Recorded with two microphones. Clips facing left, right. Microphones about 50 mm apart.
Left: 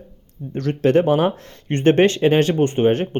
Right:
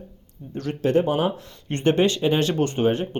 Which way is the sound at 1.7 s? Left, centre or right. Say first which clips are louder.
Left 5 dB; left.